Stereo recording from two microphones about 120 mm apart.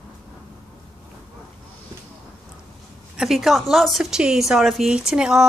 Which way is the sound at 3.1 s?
Centre (ahead or behind).